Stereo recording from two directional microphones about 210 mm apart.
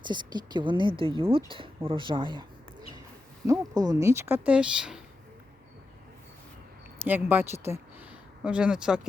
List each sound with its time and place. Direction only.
0.0 s speech: 20° right (ahead or behind); by 4.9 s 5° right (ahead or behind)
7.0 s speech: 10° right (ahead or behind)